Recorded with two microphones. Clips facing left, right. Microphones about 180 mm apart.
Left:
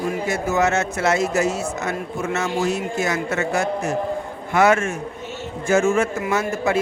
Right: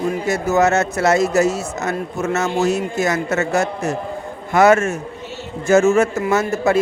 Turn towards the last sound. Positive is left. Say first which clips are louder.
# right 4 dB
turn(degrees=-40)  # may be behind; listen again after turning